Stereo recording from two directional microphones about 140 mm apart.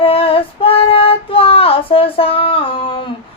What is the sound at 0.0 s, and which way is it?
Child singing, 45° left (ahead or behind).